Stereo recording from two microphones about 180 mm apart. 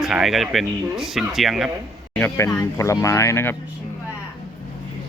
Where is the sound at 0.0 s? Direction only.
Centre (ahead or behind).